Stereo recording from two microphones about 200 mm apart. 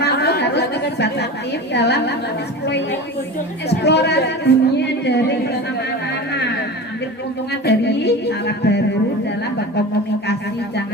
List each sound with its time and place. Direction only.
0.0 s chatter: 55° left (ahead or behind)
1.7 s speech: 55° left (ahead or behind)
3.7 s speech: 55° left (ahead or behind)
7.5 s speech: 55° left (ahead or behind)